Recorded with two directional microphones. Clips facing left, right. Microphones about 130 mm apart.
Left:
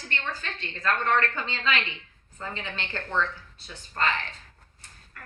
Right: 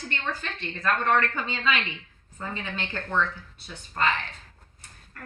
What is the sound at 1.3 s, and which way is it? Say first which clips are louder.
A woman's voice: right 1 dB; 15° right (ahead or behind).